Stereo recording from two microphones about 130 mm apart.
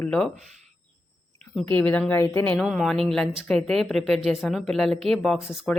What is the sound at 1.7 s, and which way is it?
Speech, 10° left (ahead or behind).